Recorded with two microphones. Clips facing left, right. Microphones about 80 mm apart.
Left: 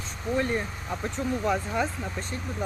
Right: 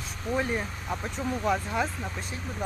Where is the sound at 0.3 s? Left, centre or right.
Centre.